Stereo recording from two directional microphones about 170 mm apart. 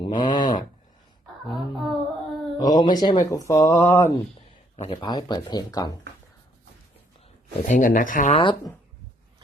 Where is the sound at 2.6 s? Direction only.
25° left (ahead or behind).